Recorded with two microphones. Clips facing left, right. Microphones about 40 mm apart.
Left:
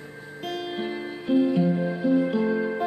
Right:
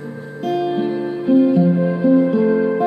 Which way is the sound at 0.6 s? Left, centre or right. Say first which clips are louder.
Right 11 dB; centre.